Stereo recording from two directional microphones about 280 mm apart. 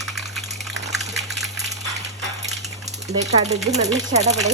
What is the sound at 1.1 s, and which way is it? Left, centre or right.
Water, centre.